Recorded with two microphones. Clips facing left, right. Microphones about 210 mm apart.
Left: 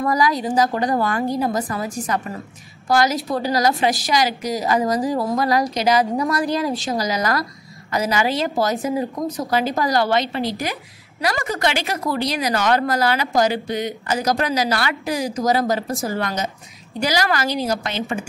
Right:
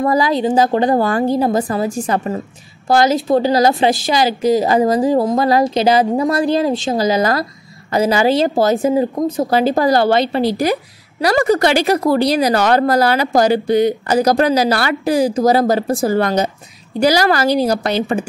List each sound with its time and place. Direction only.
0.0 s a woman's voice: 25° right (ahead or behind)